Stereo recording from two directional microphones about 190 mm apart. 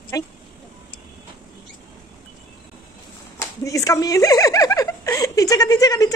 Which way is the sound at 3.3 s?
15° left (ahead or behind).